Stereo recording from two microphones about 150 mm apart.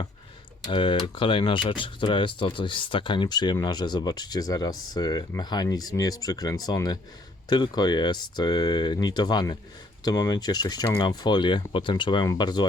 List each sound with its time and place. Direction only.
0.6 s speech: 35° left (ahead or behind)